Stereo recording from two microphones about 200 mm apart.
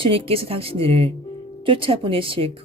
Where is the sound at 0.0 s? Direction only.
25° right (ahead or behind).